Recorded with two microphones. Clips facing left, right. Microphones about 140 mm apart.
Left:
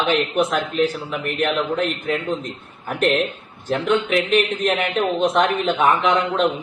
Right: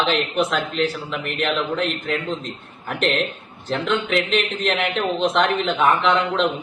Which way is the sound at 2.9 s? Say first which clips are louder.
Left 3 dB; 5° left (ahead or behind).